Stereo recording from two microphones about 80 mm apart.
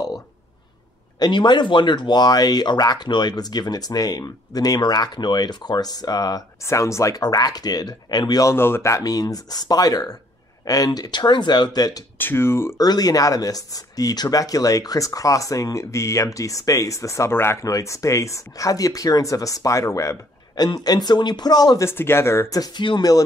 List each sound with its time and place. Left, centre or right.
1.2 s speech: left
6.6 s speech: left
7.2 s speech: left
8.5 s speech: left
10.9 s speech: left
12.2 s speech: left
12.7 s speech: left
17.6 s speech: left
20.5 s speech: left
21.7 s speech: left
22.8 s speech: left